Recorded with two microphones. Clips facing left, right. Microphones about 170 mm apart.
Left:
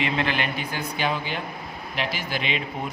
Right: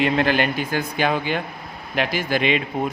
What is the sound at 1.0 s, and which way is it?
A man's voice, 60° right (ahead or behind).